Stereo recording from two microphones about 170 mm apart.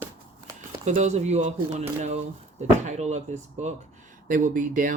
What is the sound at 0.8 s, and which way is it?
Speech, 40° right (ahead or behind).